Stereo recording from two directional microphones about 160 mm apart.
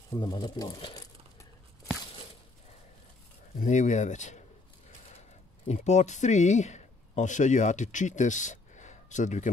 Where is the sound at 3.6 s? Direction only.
50° left (ahead or behind).